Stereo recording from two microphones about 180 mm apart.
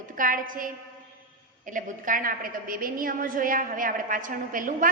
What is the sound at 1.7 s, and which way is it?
A woman's voice, 50° right (ahead or behind).